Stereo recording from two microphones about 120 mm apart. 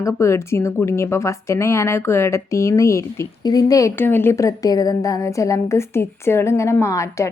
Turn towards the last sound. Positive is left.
turn(degrees=25)  # may be behind; listen again after turning